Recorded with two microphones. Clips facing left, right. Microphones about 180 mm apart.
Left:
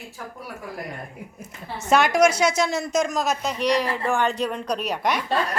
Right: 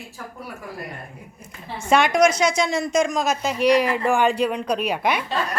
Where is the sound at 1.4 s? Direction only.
5° left (ahead or behind).